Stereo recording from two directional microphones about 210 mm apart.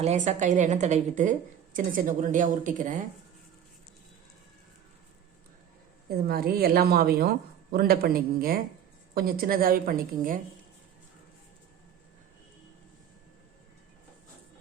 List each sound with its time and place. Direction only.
0.0 s a woman's voice: 30° right (ahead or behind)
6.1 s a woman's voice: 45° right (ahead or behind)